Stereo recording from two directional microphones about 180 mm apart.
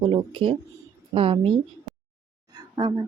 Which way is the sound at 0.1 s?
30° right (ahead or behind).